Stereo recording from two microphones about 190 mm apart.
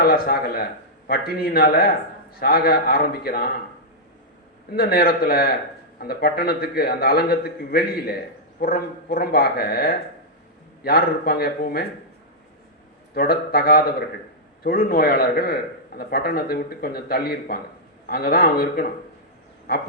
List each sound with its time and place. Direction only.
0.0 s a man's voice: 50° left (ahead or behind)
4.7 s a man's voice: 55° left (ahead or behind)
13.1 s a man's voice: 50° left (ahead or behind)